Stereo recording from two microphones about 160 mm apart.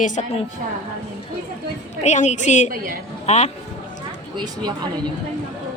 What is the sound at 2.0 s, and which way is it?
A woman's voice, 45° left (ahead or behind).